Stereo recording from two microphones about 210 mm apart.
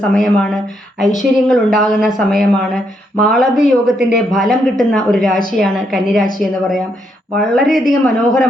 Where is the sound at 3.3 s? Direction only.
35° left (ahead or behind).